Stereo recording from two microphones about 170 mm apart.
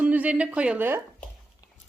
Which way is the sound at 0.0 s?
10° right (ahead or behind).